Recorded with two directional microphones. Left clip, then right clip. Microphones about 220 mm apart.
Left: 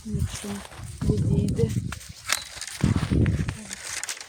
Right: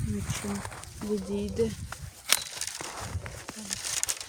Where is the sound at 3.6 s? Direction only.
35° right (ahead or behind).